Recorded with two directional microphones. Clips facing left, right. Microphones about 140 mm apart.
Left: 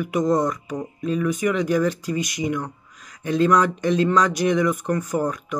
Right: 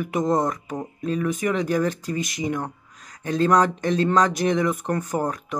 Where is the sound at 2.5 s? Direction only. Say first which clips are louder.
Left 1 dB; 45° right (ahead or behind).